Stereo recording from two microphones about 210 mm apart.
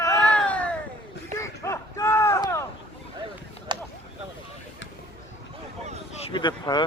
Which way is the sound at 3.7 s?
20° right (ahead or behind).